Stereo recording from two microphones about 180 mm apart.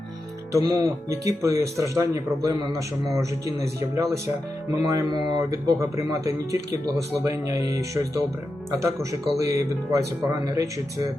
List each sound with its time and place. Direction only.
0.5 s speech: 20° right (ahead or behind)
9.4 s speech: 20° right (ahead or behind)